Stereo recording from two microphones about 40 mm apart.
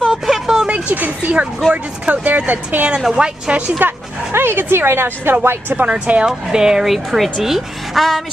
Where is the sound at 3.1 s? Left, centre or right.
Right.